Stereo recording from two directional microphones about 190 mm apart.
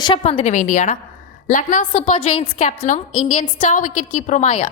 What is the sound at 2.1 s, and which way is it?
A woman's voice, 30° left (ahead or behind).